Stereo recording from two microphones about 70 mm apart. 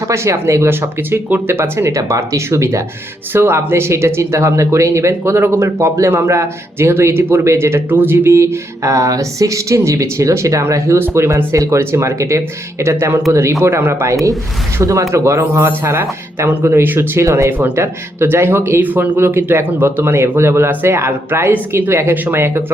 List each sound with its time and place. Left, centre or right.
0.1 s speech: right
17.2 s speech: right
17.6 s speech: right